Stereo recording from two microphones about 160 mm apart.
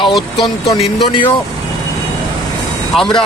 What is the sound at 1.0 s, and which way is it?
Speech, 30° left (ahead or behind).